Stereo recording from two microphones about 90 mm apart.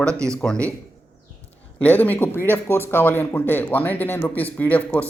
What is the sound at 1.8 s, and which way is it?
Speech, 20° left (ahead or behind).